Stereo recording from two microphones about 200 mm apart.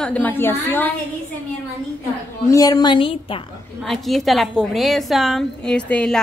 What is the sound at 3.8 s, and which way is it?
A woman's voice, centre (ahead or behind).